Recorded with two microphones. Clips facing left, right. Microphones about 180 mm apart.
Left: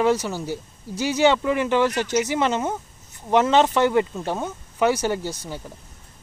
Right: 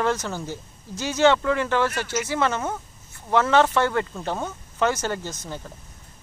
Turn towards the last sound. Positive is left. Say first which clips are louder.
# left 3 dB
turn(degrees=10)  # may be behind; listen again after turning